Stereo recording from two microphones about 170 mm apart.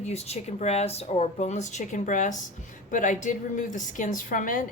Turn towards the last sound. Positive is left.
turn(degrees=50)  # may be behind; listen again after turning